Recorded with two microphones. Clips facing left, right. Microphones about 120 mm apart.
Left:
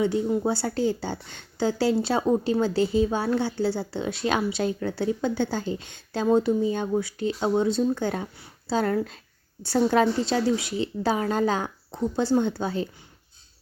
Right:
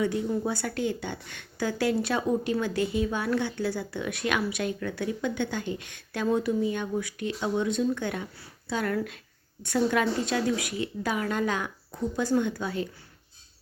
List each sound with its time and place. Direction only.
0.0 s a woman's voice: 25° left (ahead or behind)